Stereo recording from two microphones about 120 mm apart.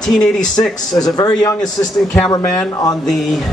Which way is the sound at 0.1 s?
5° left (ahead or behind).